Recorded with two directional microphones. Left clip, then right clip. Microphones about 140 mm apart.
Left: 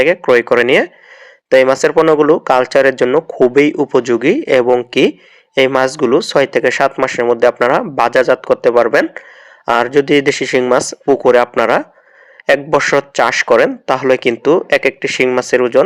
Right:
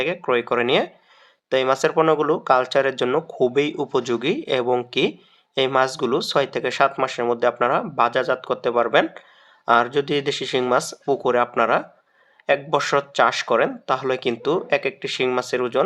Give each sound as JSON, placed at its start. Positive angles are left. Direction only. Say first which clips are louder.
{"t": 0.0, "sound": "speech", "louder": "left 11 dB", "side_deg": 35}